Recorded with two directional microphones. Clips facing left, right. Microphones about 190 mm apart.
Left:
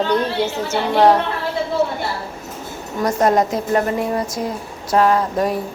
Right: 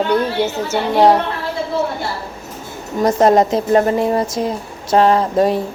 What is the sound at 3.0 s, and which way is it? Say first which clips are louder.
A woman's voice: right 4 dB; 20° right (ahead or behind).